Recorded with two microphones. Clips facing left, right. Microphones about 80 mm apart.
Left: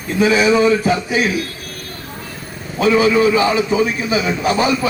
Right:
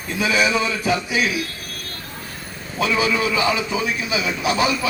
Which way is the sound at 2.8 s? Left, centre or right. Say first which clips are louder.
Left 7 dB; left.